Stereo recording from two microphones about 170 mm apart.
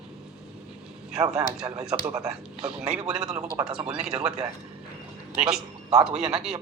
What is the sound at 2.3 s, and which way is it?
Speech, 5° right (ahead or behind).